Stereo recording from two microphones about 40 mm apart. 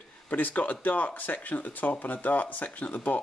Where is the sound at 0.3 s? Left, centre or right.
Left.